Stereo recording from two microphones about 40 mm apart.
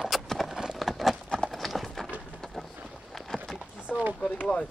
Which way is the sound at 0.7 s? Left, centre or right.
Centre.